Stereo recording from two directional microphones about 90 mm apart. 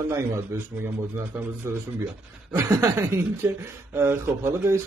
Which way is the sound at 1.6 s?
30° right (ahead or behind).